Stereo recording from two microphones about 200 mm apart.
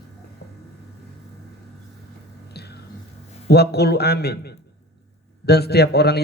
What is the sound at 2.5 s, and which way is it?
Music, 55° left (ahead or behind).